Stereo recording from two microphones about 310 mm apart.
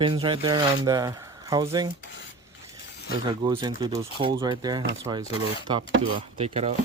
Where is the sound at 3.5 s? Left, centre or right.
Centre.